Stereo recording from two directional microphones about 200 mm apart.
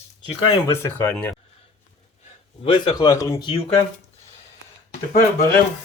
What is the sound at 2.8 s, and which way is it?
Speech, 20° left (ahead or behind).